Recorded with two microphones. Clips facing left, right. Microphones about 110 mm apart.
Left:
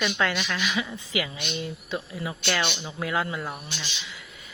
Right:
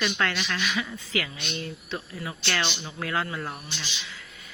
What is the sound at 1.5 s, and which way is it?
Insect, 20° left (ahead or behind).